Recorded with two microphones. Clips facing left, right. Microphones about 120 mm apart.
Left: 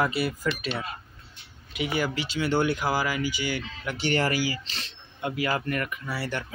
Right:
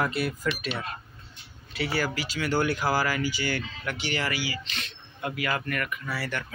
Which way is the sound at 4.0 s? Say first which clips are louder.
Left 6 dB; 45° left (ahead or behind).